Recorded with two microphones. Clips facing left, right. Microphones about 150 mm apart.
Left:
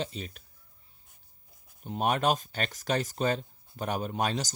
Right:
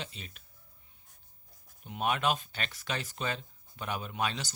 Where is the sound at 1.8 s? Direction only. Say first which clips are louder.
Left 3 dB; 40° left (ahead or behind).